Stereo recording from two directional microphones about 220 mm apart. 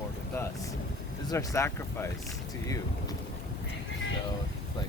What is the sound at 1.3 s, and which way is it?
Speech, 15° left (ahead or behind).